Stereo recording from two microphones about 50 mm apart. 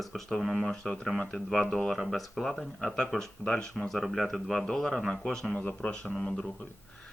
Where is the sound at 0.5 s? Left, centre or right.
Centre.